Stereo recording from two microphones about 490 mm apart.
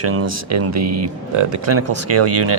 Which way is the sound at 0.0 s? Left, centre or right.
Right.